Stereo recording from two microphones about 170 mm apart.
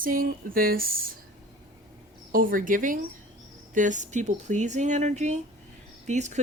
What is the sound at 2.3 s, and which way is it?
Speech, 55° right (ahead or behind).